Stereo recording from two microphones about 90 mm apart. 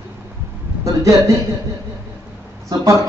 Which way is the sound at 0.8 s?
35° right (ahead or behind).